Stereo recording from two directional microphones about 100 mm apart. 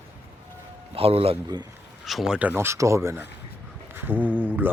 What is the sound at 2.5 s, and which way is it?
Speech, 25° right (ahead or behind).